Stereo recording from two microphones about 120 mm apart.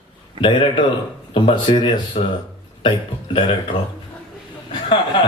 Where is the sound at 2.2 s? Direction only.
55° left (ahead or behind).